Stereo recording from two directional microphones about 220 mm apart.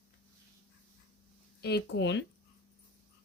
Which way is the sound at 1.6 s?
50° left (ahead or behind).